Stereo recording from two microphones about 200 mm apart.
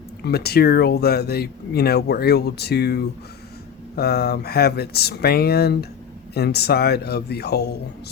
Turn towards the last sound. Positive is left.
turn(degrees=55)  # may be behind; listen again after turning